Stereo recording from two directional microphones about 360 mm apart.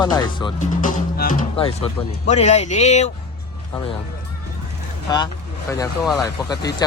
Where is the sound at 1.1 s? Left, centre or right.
Left.